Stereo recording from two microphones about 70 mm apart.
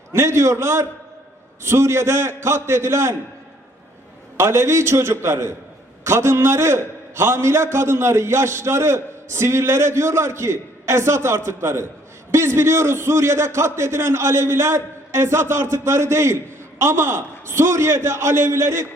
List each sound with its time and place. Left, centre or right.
0.1 s a man's voice: right
4.4 s a man's voice: right